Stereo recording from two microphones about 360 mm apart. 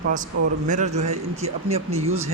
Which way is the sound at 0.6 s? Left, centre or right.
Centre.